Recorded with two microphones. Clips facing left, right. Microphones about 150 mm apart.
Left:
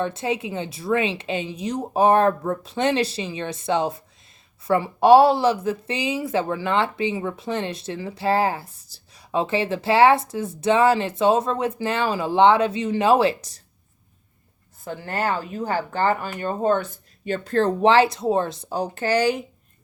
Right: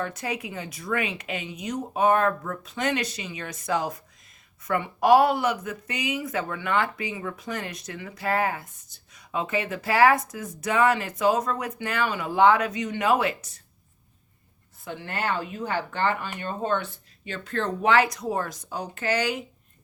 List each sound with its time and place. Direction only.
0.0 s speech: 25° left (ahead or behind)
14.8 s speech: 40° left (ahead or behind)